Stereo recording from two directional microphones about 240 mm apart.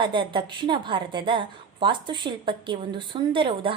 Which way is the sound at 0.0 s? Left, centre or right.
Centre.